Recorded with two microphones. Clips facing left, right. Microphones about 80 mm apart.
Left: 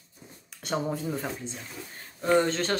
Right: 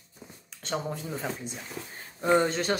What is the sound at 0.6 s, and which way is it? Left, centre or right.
Speech, centre.